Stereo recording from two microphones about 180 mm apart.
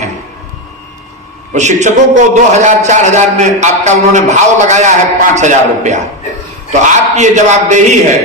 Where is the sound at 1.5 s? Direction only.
40° right (ahead or behind).